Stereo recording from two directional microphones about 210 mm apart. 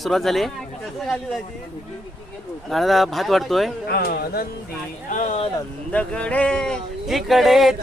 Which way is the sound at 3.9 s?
45° left (ahead or behind).